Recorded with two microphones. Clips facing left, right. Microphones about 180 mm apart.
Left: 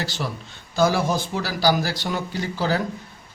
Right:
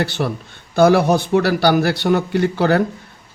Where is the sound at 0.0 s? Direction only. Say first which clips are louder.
Right 8 dB; 60° right (ahead or behind).